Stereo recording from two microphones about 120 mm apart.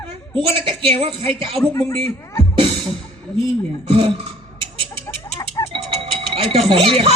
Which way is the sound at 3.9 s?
45° right (ahead or behind).